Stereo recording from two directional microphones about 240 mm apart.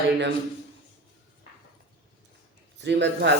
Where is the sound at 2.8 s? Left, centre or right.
Right.